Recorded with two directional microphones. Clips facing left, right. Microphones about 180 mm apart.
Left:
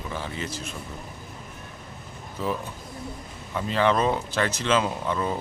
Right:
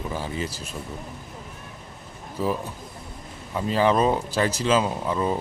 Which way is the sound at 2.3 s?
10° right (ahead or behind).